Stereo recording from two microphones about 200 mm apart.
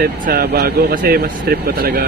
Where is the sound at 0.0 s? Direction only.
50° right (ahead or behind).